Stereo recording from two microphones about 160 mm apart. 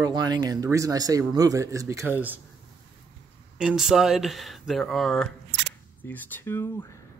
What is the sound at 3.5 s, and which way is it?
Speech, 5° right (ahead or behind).